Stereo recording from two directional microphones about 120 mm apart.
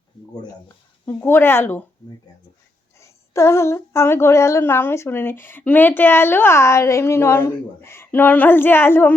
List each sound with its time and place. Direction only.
1.0 s speech: 20° left (ahead or behind)
3.0 s speech: 20° left (ahead or behind)